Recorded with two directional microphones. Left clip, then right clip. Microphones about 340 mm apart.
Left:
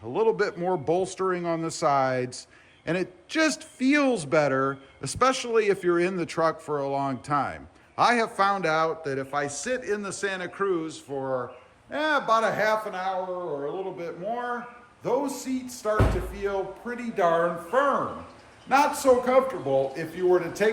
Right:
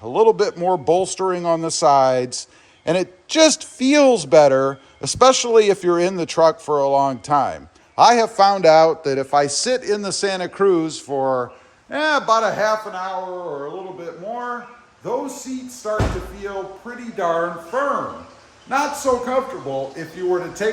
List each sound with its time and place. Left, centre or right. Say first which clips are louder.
0.0 s speech: right 9 dB; centre
15.9 s speech: right 3 dB; centre